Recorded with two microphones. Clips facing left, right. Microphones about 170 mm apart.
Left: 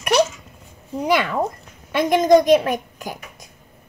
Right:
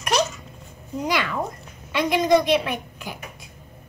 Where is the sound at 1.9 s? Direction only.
45° left (ahead or behind).